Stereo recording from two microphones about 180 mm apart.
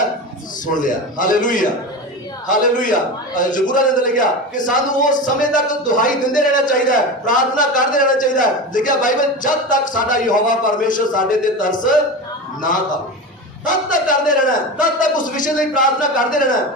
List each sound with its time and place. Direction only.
0.8 s a man's voice: 45° left (ahead or behind)